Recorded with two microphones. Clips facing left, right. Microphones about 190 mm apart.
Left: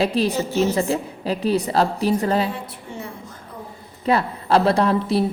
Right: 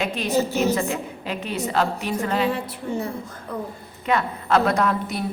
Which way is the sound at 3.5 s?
70° right (ahead or behind).